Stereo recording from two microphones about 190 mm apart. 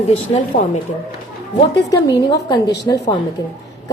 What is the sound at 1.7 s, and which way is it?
A woman's voice, 20° left (ahead or behind).